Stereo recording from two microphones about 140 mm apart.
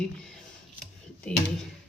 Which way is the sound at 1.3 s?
5° left (ahead or behind).